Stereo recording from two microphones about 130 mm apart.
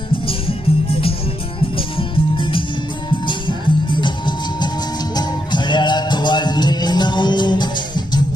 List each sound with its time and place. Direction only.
0.3 s music: 45° left (ahead or behind)
4.0 s music: 35° left (ahead or behind)